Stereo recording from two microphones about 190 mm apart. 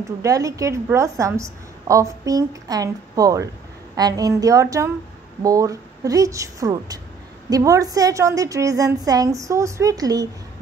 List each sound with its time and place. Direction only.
0.2 s a woman's voice: 15° right (ahead or behind)